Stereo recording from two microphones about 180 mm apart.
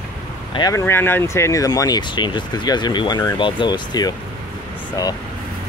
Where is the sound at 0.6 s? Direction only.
20° left (ahead or behind).